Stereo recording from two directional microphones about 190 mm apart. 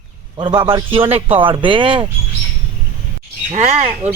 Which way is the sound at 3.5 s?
35° right (ahead or behind).